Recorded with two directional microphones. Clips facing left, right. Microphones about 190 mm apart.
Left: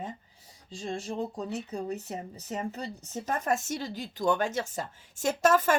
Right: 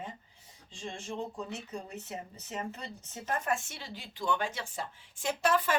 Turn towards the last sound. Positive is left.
turn(degrees=45)  # may be behind; listen again after turning